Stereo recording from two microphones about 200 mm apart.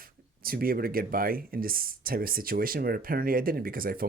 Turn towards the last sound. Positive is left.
turn(degrees=-45)  # may be behind; listen again after turning